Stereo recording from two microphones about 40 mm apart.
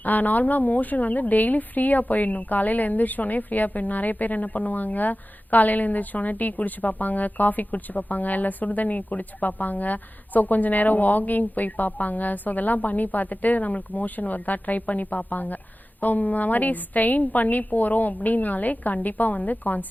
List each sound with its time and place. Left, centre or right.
0.0 s speech: left